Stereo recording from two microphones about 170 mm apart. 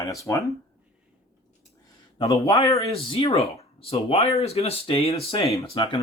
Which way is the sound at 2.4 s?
20° left (ahead or behind).